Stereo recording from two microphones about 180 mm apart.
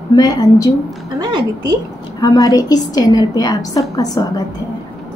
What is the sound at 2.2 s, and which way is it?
A woman's voice, 20° left (ahead or behind).